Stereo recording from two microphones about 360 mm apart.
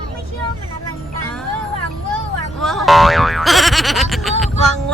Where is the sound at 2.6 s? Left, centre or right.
Centre.